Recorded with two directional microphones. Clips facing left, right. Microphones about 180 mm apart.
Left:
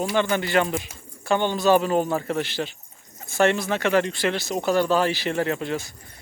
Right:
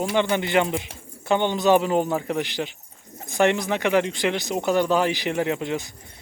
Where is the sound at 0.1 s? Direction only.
20° right (ahead or behind).